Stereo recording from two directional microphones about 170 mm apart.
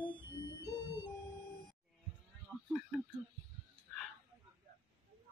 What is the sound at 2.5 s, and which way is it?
Music, centre (ahead or behind).